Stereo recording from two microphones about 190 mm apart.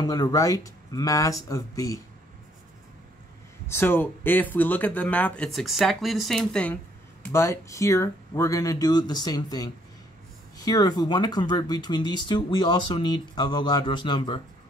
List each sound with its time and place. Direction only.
0.0 s speech: 20° left (ahead or behind)
3.6 s speech: 10° left (ahead or behind)